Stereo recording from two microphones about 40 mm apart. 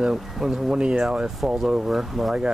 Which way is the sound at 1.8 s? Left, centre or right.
Centre.